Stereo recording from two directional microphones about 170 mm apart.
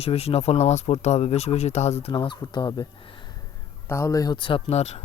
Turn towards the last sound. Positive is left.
turn(degrees=40)  # may be behind; listen again after turning